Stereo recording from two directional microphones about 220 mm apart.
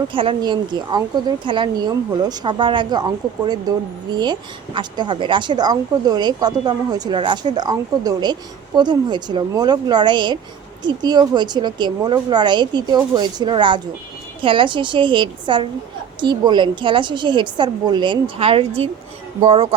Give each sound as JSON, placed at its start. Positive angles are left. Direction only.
{"t": 0.1, "sound": "speech", "side_deg": -25}